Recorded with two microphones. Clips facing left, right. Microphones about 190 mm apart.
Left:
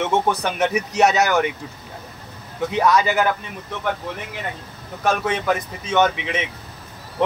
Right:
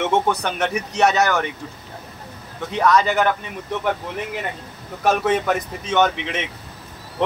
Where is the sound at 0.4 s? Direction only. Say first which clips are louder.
Left 2 dB; 5° left (ahead or behind).